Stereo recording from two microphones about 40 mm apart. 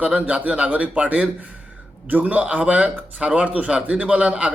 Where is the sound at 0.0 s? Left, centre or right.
Right.